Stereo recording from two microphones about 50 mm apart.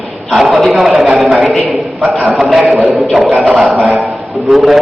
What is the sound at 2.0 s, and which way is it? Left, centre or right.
Speech, right.